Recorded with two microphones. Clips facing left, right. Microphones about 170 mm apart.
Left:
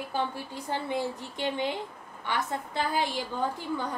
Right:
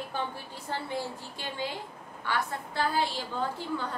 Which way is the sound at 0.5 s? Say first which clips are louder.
Left 3 dB; 15° left (ahead or behind).